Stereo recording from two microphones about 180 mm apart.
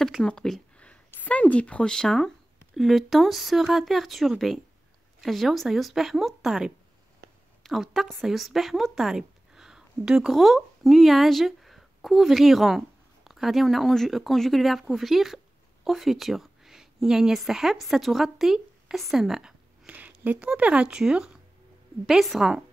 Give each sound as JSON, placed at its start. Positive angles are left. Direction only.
{"t": 0.0, "sound": "a woman's voice", "side_deg": 5}
{"t": 7.2, "sound": "a sound", "side_deg": -60}
{"t": 7.6, "sound": "a woman's voice", "side_deg": 0}